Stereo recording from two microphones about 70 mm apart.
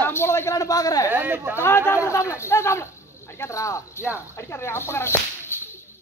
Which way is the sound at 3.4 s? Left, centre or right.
Left.